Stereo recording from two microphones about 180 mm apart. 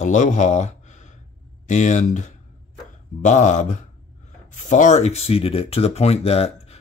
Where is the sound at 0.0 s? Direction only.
45° left (ahead or behind).